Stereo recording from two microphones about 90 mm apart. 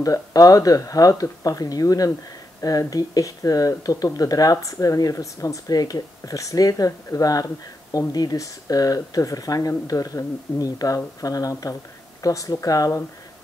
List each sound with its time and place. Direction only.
0.0 s speech: 40° left (ahead or behind)